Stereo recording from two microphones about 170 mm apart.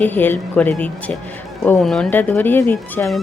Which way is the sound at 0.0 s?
10° left (ahead or behind).